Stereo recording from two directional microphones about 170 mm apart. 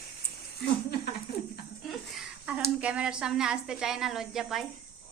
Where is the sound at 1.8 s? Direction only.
Centre (ahead or behind).